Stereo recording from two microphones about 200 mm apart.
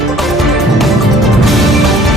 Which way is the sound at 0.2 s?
Centre (ahead or behind).